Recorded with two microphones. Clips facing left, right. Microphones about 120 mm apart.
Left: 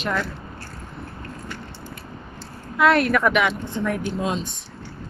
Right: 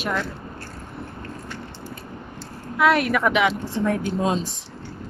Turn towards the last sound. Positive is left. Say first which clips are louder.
# right 2 dB
turn(degrees=-30)  # may be behind; listen again after turning